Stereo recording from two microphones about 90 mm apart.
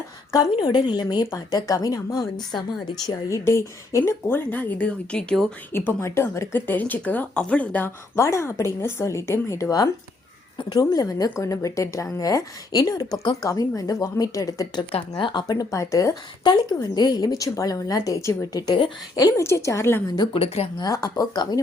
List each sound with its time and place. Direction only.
0.6 s a woman's voice: 55° left (ahead or behind); by 2.3 s 35° left (ahead or behind)
2.5 s a woman's voice: 55° left (ahead or behind)
3.2 s a woman's voice: 30° left (ahead or behind); by 5.5 s 10° left (ahead or behind)
5.7 s a woman's voice: 30° left (ahead or behind)
8.1 s a woman's voice: 30° left (ahead or behind)
14.9 s speech: 65° left (ahead or behind)
15.4 s a woman's voice: 40° left (ahead or behind)
16.4 s a woman's voice: 55° left (ahead or behind); by 20.0 s 30° left (ahead or behind)
20.3 s speech: 85° left
20.8 s a woman's voice: 45° left (ahead or behind)